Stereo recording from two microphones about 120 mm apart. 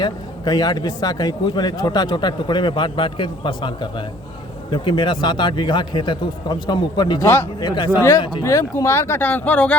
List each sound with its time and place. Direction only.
0.0 s speech: 35° left (ahead or behind)
8.4 s speech: 25° left (ahead or behind)